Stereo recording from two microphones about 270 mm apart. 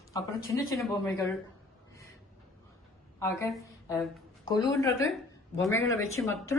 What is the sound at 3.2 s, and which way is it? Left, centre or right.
Speech, centre.